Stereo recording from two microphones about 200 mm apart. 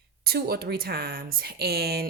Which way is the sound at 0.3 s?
50° right (ahead or behind).